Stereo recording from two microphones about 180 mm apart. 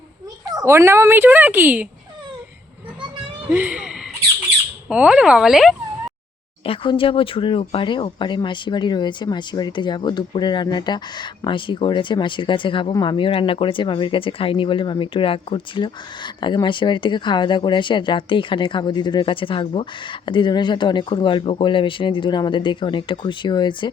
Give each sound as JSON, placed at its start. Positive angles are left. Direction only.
{"t": 0.5, "sound": "speech", "side_deg": -15}
{"t": 3.5, "sound": "speech", "side_deg": -5}
{"t": 6.7, "sound": "speech", "side_deg": 30}